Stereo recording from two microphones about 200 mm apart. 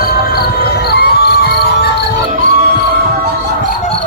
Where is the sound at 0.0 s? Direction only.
50° left (ahead or behind).